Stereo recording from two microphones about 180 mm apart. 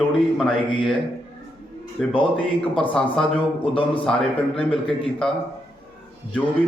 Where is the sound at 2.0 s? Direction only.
Centre (ahead or behind).